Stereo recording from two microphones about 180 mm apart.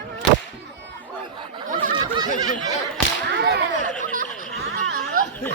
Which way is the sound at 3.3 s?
70° right (ahead or behind).